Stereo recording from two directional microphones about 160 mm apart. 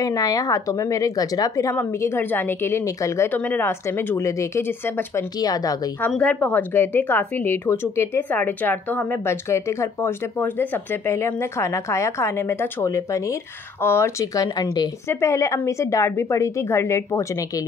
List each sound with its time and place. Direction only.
0.0 s a woman's voice: 20° left (ahead or behind)
5.9 s a woman's voice: 10° left (ahead or behind)